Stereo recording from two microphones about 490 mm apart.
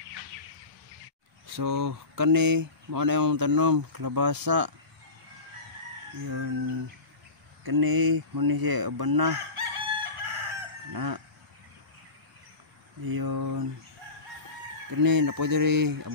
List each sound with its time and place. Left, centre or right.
1.6 s speech: right
6.2 s speech: right
9.6 s chicken: right
10.9 s speech: right
13.0 s speech: right
15.0 s speech: right